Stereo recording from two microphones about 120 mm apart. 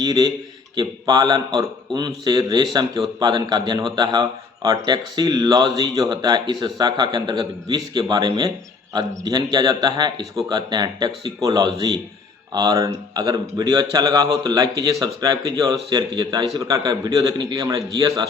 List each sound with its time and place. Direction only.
0.0 s a man's voice: 35° right (ahead or behind)